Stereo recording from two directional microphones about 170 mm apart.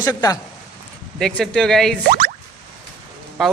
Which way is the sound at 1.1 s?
5° left (ahead or behind).